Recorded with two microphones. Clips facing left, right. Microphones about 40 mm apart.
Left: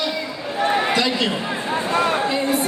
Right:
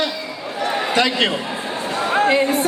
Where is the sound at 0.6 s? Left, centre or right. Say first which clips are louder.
Left 3 dB; left.